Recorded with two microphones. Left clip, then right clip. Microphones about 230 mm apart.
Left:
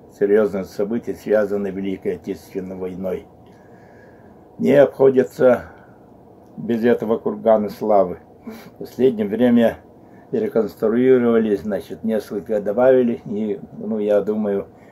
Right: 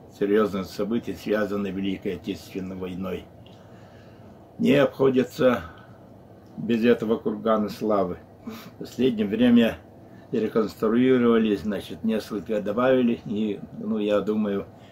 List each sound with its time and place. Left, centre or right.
0.2 s speech: centre
4.6 s speech: centre
6.7 s speech: centre